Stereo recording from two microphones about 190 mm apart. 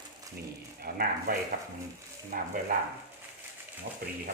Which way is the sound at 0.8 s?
50° right (ahead or behind).